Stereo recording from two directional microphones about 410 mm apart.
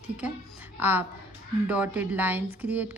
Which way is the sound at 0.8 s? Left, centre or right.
Centre.